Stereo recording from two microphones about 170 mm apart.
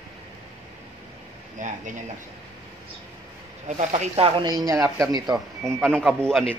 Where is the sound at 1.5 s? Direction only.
50° right (ahead or behind).